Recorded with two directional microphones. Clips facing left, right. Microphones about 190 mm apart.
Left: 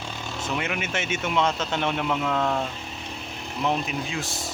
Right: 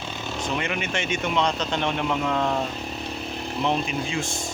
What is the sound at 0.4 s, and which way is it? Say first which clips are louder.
Speech: right 1 dB; 5° left (ahead or behind).